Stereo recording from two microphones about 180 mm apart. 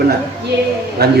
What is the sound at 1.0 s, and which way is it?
Speech, 60° right (ahead or behind).